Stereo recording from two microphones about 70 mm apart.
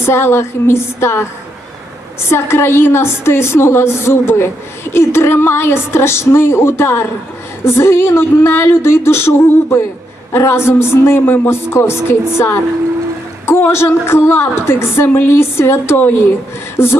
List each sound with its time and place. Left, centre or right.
0.0 s a woman's voice: left
2.3 s a woman's voice: left
16.7 s beatboxing: left